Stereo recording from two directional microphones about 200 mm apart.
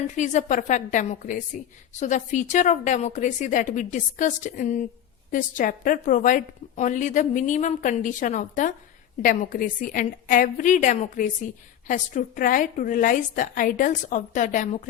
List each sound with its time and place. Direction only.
0.2 s a woman's voice: 35° left (ahead or behind)